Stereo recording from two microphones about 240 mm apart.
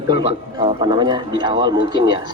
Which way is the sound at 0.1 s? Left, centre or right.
Right.